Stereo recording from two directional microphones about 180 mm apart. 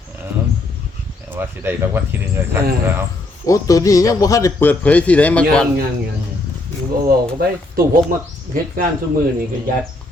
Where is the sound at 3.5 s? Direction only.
20° left (ahead or behind).